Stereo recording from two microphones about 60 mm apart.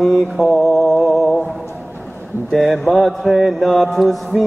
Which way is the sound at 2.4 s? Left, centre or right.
Centre.